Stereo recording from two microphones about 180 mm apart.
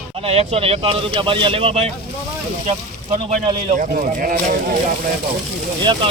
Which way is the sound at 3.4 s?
30° right (ahead or behind).